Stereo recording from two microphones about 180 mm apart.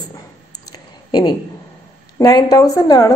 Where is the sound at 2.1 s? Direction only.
20° left (ahead or behind).